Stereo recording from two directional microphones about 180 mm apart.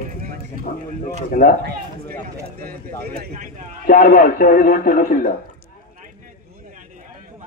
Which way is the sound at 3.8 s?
50° left (ahead or behind).